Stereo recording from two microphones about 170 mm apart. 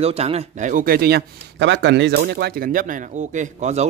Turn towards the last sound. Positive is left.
turn(degrees=-40)  # may be behind; listen again after turning